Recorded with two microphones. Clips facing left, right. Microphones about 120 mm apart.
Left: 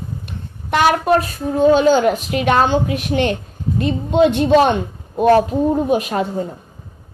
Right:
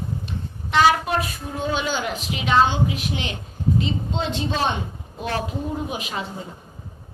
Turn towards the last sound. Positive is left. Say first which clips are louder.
# left 11 dB
turn(degrees=50)  # may be behind; listen again after turning